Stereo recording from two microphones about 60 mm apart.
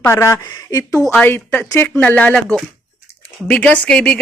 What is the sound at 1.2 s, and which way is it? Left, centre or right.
Speech, left.